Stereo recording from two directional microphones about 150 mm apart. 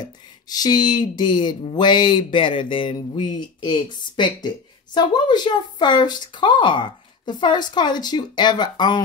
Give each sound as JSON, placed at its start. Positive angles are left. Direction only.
{"t": 0.0, "sound": "speech", "side_deg": 25}